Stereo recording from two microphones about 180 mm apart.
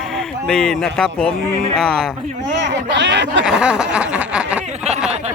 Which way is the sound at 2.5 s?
80° right.